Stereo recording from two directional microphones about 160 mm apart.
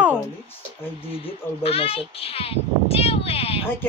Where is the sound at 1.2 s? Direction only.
35° left (ahead or behind).